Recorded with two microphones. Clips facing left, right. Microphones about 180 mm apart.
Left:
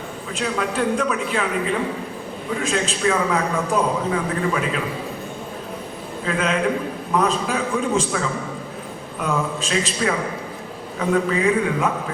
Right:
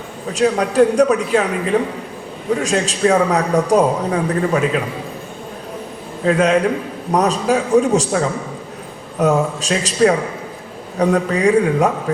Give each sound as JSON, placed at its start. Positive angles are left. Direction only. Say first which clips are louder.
{"t": 0.3, "sound": "a man's voice", "louder": "right 10 dB", "side_deg": -40}
{"t": 2.6, "sound": "a man's voice", "louder": "right 4 dB", "side_deg": -40}
{"t": 6.2, "sound": "a man's voice", "louder": "right 7 dB", "side_deg": -40}